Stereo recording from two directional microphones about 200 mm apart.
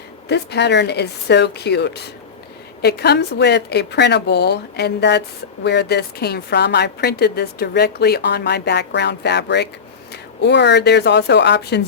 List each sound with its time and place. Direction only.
0.3 s a woman's voice: 55° left (ahead or behind)